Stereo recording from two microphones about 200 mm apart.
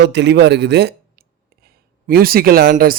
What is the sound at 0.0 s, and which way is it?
Speech, 60° right (ahead or behind).